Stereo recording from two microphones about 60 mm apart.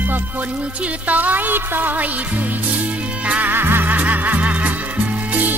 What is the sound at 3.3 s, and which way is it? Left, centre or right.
Music, right.